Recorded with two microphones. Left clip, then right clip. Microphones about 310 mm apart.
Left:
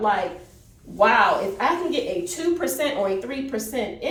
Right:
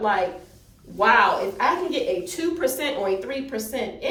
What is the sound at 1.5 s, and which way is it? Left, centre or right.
A woman's voice, centre.